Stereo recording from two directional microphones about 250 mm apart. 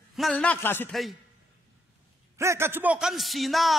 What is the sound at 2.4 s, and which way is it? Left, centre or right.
A man's voice, centre.